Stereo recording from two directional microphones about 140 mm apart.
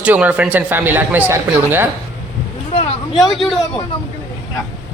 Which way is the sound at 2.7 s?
45° left (ahead or behind).